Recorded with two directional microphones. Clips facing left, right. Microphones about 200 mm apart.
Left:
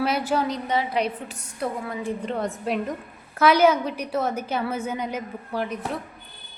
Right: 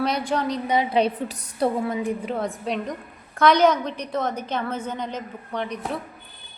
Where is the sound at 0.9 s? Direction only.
35° right (ahead or behind).